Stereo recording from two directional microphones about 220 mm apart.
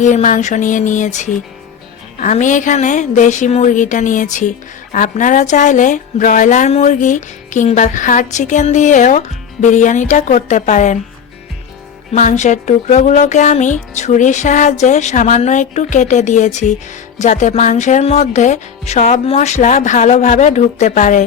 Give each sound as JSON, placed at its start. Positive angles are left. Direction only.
{"t": 0.0, "sound": "a woman's voice", "side_deg": 35}
{"t": 12.1, "sound": "a woman's voice", "side_deg": 35}